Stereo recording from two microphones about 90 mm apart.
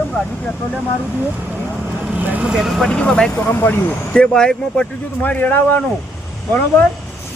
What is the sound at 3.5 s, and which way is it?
Speech, 25° left (ahead or behind).